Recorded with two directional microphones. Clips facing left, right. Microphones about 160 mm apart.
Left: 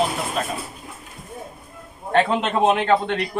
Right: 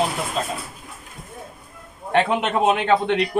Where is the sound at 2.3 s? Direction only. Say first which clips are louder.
Even; 5° right (ahead or behind).